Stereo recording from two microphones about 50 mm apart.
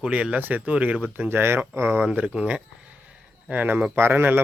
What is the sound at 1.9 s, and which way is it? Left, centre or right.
Speech, right.